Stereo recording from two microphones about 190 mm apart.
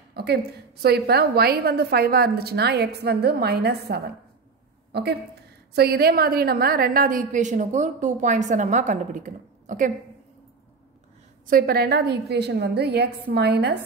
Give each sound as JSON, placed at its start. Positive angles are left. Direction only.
{"t": 0.1, "sound": "a sound", "side_deg": -60}
{"t": 0.8, "sound": "a woman's voice", "side_deg": -55}
{"t": 5.8, "sound": "a woman's voice", "side_deg": -55}
{"t": 11.4, "sound": "a woman's voice", "side_deg": -50}